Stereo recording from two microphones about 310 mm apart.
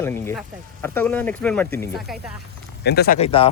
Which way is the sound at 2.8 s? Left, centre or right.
Left.